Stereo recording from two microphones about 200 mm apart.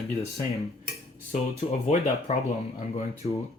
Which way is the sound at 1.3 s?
30° left (ahead or behind).